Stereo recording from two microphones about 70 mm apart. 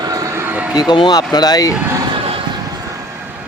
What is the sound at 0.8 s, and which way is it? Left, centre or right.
Speech, left.